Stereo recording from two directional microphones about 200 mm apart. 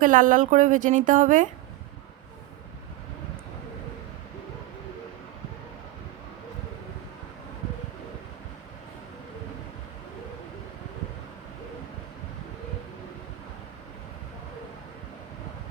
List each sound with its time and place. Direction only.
0.0 s speech: 40° right (ahead or behind)